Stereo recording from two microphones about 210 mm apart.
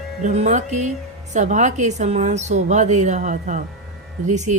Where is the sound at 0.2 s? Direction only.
35° right (ahead or behind).